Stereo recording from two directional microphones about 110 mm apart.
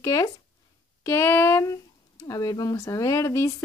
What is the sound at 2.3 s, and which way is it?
Speech, 35° left (ahead or behind).